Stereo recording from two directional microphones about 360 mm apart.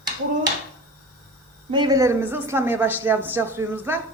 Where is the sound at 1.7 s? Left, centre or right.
Centre.